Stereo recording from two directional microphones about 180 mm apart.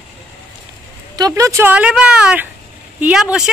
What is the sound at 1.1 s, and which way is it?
Speech, 20° right (ahead or behind).